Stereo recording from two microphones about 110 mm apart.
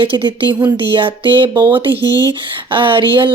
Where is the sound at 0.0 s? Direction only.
50° right (ahead or behind).